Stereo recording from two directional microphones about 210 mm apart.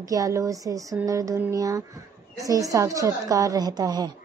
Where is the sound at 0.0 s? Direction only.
15° right (ahead or behind).